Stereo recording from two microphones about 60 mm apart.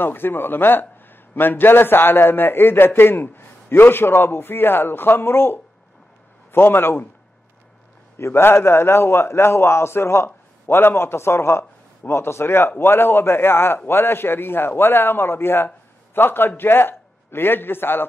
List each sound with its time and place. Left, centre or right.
0.0 s a man's voice: left
8.2 s a man's voice: left